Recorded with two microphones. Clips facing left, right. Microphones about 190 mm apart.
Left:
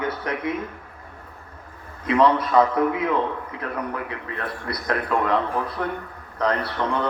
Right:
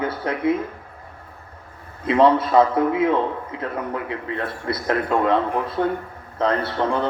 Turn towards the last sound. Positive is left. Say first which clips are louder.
# right 3 dB
turn(degrees=-30)  # may be behind; listen again after turning